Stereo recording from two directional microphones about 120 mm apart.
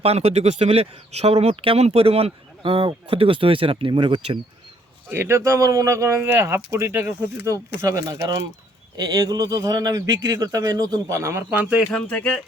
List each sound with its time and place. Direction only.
0.0 s speech: 55° right (ahead or behind)
5.0 s a man's voice: 15° right (ahead or behind)
11.9 s speech: 10° left (ahead or behind)